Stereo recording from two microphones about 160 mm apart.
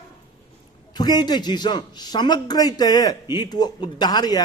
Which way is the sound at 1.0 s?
25° left (ahead or behind).